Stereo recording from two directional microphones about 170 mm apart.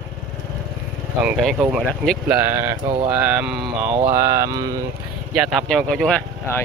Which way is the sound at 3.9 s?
20° right (ahead or behind).